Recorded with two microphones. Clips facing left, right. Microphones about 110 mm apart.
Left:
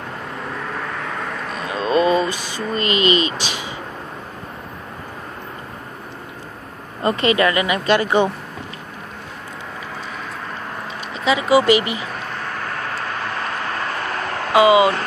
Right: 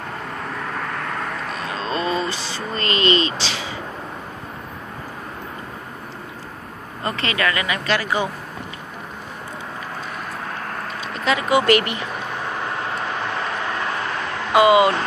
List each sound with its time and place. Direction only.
0.6 s vehicle: centre (ahead or behind)
3.3 s a sound: 15° left (ahead or behind)
7.0 s speech: 20° left (ahead or behind)
11.1 s speech: 5° left (ahead or behind)
14.5 s speech: 5° left (ahead or behind)